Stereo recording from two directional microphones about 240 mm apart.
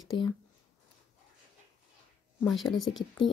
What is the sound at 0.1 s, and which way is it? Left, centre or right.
Speech, centre.